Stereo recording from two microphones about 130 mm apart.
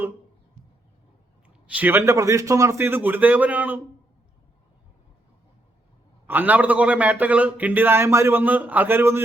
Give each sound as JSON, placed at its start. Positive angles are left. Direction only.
{"t": 1.6, "sound": "a man's voice", "side_deg": -10}
{"t": 6.2, "sound": "a man's voice", "side_deg": -15}